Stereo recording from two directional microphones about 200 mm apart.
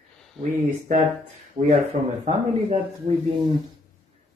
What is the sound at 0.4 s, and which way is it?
Speech, 40° right (ahead or behind).